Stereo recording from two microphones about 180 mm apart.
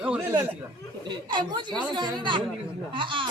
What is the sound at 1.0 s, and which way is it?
Speech, 25° right (ahead or behind).